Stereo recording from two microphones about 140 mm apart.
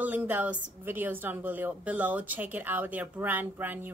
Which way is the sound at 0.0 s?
10° right (ahead or behind).